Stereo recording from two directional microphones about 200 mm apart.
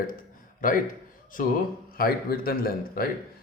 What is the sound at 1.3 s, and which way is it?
A man's voice, 45° left (ahead or behind).